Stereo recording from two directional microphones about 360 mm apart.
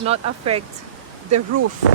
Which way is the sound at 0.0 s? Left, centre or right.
Centre.